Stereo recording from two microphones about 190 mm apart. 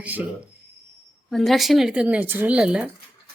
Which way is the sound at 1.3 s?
Centre (ahead or behind).